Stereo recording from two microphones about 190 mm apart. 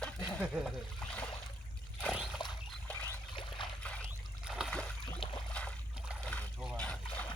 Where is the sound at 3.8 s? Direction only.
5° left (ahead or behind).